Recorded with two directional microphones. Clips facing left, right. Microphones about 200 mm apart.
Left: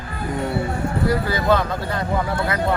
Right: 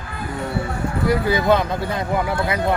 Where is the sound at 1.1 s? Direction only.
15° right (ahead or behind).